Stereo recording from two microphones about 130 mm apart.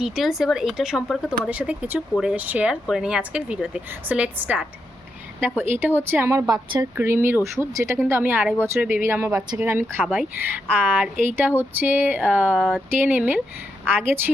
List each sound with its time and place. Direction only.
0.0 s speech: centre (ahead or behind)
5.8 s speech: 15° right (ahead or behind)
10.0 s speech: centre (ahead or behind)
10.7 s speech: 15° right (ahead or behind)
12.5 s speech: centre (ahead or behind)
12.9 s speech: 15° right (ahead or behind)